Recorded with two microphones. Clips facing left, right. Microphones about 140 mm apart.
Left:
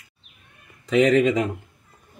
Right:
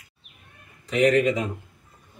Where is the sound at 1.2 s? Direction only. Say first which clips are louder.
Left 3 dB; 90° left.